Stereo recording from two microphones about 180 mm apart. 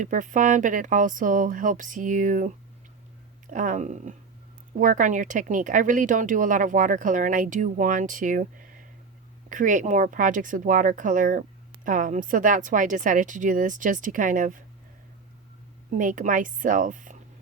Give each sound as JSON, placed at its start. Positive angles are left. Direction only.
{"t": 0.0, "sound": "speech", "side_deg": -45}
{"t": 15.9, "sound": "speech", "side_deg": -45}